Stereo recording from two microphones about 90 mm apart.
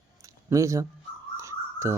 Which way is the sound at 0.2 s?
40° right (ahead or behind).